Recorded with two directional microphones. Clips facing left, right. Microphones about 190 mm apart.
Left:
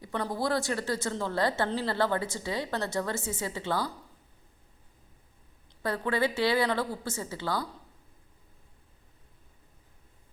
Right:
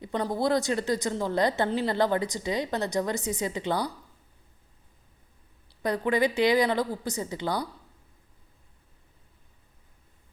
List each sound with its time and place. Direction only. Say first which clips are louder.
0.0 s speech: right 4 dB; 15° right (ahead or behind)
5.6 s speech: right 4 dB; 15° right (ahead or behind)